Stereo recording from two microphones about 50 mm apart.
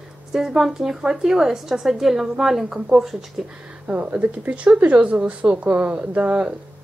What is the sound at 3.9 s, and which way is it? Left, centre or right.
Speech, right.